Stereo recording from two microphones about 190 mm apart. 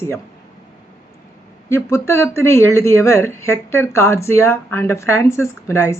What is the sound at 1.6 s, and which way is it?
Speech, 15° left (ahead or behind).